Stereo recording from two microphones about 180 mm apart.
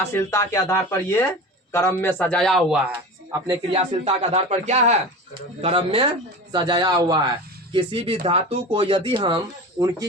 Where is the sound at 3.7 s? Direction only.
35° right (ahead or behind).